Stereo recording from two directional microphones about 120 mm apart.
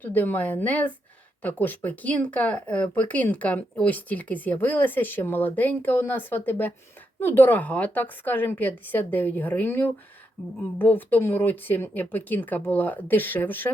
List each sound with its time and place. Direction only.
0.0 s speech: 15° left (ahead or behind)